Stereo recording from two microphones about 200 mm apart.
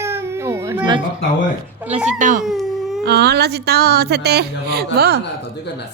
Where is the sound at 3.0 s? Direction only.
55° right (ahead or behind).